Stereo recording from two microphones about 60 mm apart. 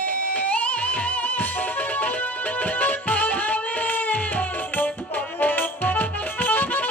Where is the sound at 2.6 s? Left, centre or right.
Left.